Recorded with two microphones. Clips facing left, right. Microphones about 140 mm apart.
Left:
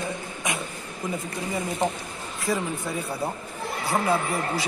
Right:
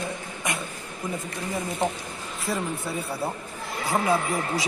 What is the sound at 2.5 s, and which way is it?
A man's voice, 5° right (ahead or behind).